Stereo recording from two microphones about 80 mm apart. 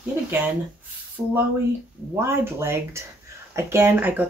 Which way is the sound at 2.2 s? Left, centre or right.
Right.